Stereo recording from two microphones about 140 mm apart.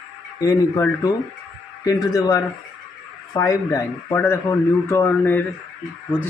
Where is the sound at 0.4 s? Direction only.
25° left (ahead or behind).